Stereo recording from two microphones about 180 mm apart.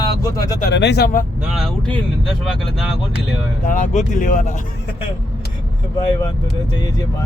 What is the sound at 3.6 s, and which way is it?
Speech, 45° left (ahead or behind).